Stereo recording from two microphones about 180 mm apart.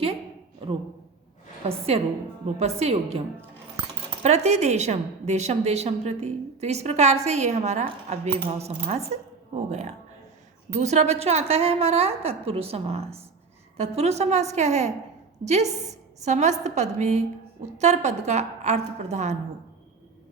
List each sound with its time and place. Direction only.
1.6 s a woman's voice: 35° right (ahead or behind)
4.2 s a woman's voice: 40° right (ahead or behind)